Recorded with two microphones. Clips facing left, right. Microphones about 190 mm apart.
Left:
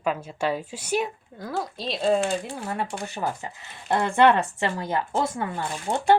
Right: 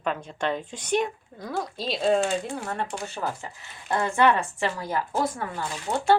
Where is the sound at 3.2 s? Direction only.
20° left (ahead or behind).